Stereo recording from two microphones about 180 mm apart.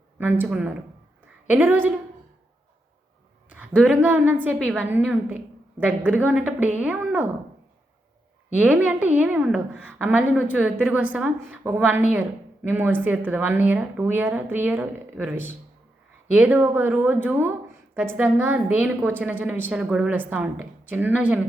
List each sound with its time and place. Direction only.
0.2 s a woman's voice: 10° right (ahead or behind)
3.8 s a woman's voice: 10° right (ahead or behind)
8.5 s a woman's voice: 10° right (ahead or behind)